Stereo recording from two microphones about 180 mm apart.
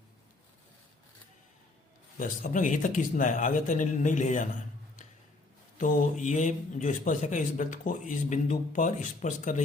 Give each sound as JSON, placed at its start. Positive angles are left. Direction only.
{"t": 2.1, "sound": "a man's voice", "side_deg": 45}
{"t": 5.8, "sound": "a man's voice", "side_deg": 45}